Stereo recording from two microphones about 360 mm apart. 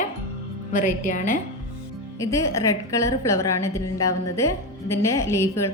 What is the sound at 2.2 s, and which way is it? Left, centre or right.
A woman's voice, centre.